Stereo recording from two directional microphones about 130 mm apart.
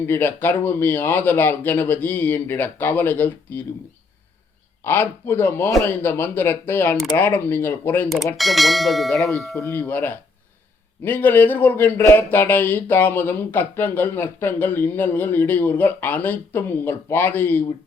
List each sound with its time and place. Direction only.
0.0 s speech: 15° left (ahead or behind)
4.8 s speech: 15° left (ahead or behind)
8.4 s speech: centre (ahead or behind)
9.6 s speech: 15° left (ahead or behind)